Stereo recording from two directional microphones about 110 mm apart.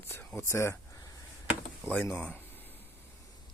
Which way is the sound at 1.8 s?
15° left (ahead or behind).